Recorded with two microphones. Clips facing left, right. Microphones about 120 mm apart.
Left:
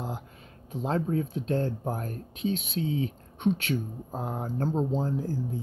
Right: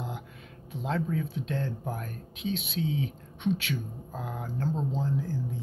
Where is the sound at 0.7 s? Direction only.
40° left (ahead or behind).